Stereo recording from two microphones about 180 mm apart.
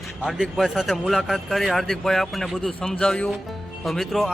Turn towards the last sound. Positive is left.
turn(degrees=0)  # may be behind; listen again after turning